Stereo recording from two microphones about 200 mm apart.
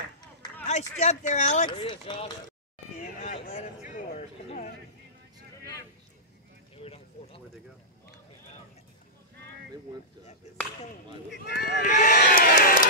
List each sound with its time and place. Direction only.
0.7 s speech: 35° left (ahead or behind)
1.7 s speech: 25° left (ahead or behind)
3.0 s speech: 35° left (ahead or behind)
4.5 s a sound: 40° left (ahead or behind)
6.8 s a sound: 30° left (ahead or behind)
11.3 s speech: 55° left (ahead or behind)
11.9 s speech: 40° left (ahead or behind)
12.2 s crowd: 45° left (ahead or behind)